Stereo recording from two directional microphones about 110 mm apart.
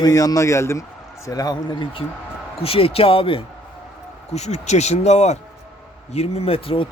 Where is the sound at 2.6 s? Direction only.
60° left (ahead or behind).